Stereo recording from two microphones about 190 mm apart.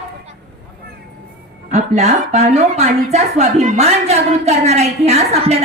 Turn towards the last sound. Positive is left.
turn(degrees=-35)  # may be behind; listen again after turning